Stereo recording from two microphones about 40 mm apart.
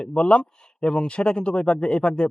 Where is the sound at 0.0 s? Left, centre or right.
Left.